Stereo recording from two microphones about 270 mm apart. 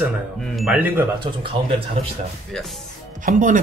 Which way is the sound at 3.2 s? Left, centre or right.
Right.